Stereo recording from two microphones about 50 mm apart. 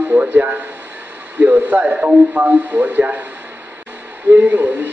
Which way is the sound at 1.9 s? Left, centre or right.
Right.